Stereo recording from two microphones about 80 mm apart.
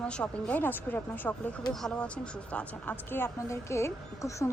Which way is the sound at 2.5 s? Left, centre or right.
Left.